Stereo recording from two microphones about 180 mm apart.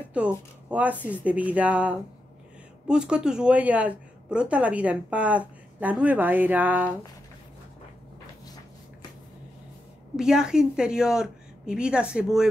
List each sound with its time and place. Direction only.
0.2 s speech: 5° right (ahead or behind)
10.1 s a woman's voice: 5° right (ahead or behind)